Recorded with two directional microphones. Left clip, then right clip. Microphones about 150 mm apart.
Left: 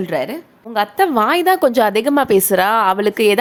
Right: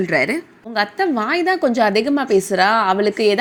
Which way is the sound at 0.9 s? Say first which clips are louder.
Left 7 dB; 30° left (ahead or behind).